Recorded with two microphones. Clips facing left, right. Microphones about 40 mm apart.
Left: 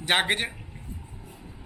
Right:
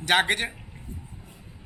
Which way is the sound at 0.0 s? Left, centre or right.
Centre.